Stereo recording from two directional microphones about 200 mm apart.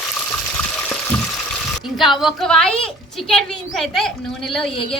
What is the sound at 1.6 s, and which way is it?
A woman's voice, centre (ahead or behind).